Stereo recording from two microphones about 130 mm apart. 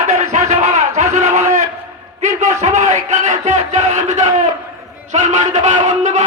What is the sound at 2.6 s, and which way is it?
Music, 65° right (ahead or behind).